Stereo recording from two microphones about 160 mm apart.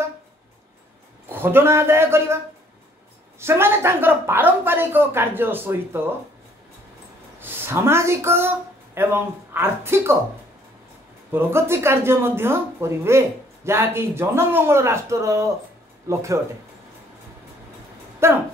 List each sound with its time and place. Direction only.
1.3 s speech: 15° right (ahead or behind)
7.3 s speech: 15° right (ahead or behind)
11.3 s speech: 15° right (ahead or behind)
18.2 s speech: 15° right (ahead or behind)